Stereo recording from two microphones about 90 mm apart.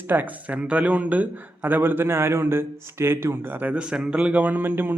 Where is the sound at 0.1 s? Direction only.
20° right (ahead or behind).